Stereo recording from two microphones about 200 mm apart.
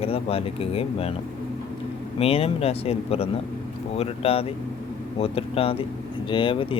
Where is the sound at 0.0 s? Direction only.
30° left (ahead or behind).